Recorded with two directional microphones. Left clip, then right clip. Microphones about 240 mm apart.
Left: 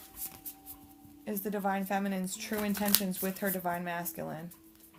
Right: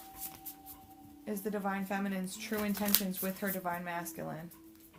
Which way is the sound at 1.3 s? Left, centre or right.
Left.